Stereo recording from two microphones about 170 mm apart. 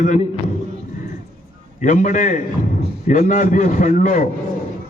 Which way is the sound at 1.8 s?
45° left (ahead or behind).